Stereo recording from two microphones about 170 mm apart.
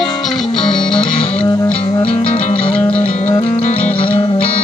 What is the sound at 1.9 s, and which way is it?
Music, 35° left (ahead or behind).